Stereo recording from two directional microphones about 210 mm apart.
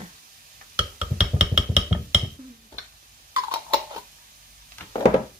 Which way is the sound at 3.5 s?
15° right (ahead or behind).